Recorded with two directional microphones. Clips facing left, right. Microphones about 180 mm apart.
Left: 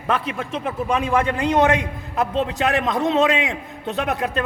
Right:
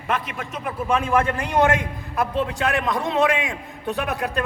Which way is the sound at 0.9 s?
20° left (ahead or behind).